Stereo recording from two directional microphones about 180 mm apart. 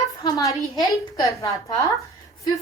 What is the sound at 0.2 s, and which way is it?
A woman's voice, 20° left (ahead or behind).